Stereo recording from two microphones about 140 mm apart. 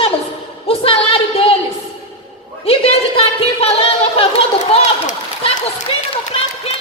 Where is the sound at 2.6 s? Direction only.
40° left (ahead or behind).